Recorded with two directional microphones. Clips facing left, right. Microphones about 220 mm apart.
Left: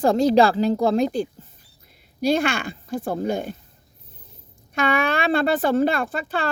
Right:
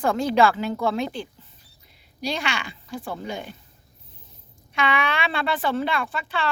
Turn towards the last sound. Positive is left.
turn(degrees=45)  # may be behind; listen again after turning